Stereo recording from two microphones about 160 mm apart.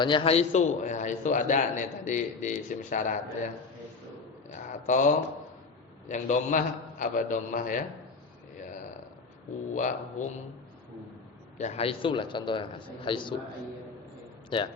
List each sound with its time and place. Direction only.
0.0 s a man's voice: 30° left (ahead or behind); by 3.2 s 55° left (ahead or behind)
4.5 s a sound: 50° left (ahead or behind)
6.1 s a man's voice: 50° left (ahead or behind)
9.7 s a man's voice: 50° left (ahead or behind)
11.5 s a man's voice: 45° left (ahead or behind)
14.5 s a man's voice: 30° left (ahead or behind)